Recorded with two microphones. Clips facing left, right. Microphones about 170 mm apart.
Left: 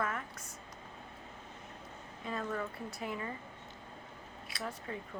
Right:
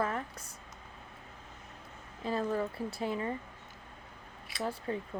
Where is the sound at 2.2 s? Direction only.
30° right (ahead or behind).